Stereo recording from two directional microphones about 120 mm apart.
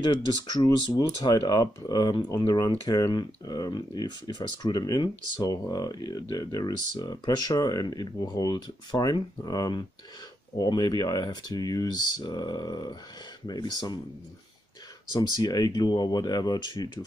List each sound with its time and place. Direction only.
0.6 s speech: 30° left (ahead or behind)
15.1 s speech: 35° left (ahead or behind)